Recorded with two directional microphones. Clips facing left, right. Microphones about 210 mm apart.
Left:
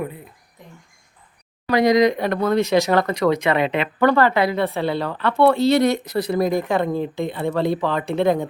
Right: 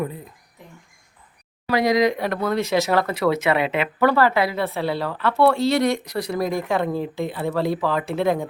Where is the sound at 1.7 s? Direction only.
5° right (ahead or behind).